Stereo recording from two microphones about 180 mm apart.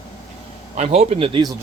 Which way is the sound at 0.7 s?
35° right (ahead or behind).